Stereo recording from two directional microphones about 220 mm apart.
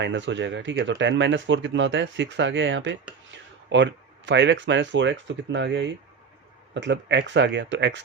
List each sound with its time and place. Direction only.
0.0 s speech: 55° right (ahead or behind)
3.3 s a sound: 55° right (ahead or behind)
4.3 s speech: 55° right (ahead or behind)